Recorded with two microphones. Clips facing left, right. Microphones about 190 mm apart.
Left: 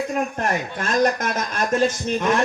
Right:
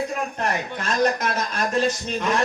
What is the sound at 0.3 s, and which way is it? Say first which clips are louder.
A man's voice: left 2 dB; 50° left (ahead or behind).